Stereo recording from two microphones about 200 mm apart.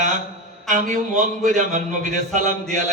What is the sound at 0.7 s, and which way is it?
Mantra, 40° right (ahead or behind).